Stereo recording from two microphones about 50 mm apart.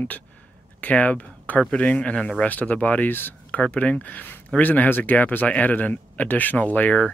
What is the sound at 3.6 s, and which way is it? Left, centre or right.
Speech, left.